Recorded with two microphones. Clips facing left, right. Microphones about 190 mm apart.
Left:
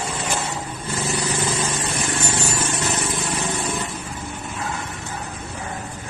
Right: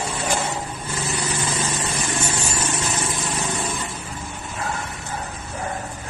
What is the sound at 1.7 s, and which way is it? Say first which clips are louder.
Vehicle: left 1 dB; 60° left (ahead or behind).